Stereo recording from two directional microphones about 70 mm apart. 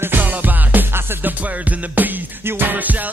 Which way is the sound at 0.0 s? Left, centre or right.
Right.